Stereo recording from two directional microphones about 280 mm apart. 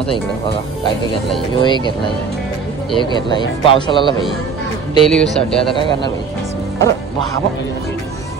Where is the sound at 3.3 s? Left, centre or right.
Centre.